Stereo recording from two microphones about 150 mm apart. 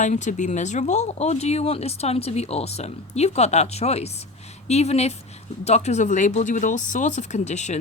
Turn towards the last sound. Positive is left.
turn(degrees=50)  # may be behind; listen again after turning